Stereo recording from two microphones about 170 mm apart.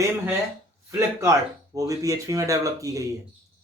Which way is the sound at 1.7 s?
20° right (ahead or behind).